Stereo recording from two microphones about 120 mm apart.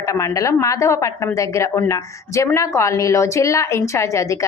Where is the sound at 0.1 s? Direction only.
25° left (ahead or behind).